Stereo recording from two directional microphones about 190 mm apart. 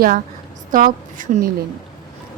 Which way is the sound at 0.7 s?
45° right (ahead or behind).